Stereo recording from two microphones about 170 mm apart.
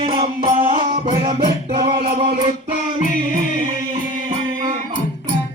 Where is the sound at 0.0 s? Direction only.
30° right (ahead or behind).